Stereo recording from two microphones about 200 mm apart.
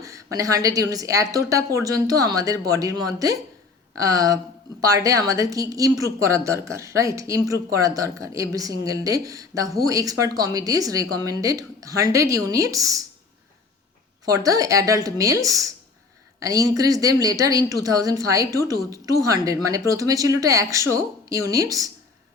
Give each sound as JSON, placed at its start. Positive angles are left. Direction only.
{"t": 0.0, "sound": "a woman's voice", "side_deg": -15}
{"t": 14.3, "sound": "a woman's voice", "side_deg": -15}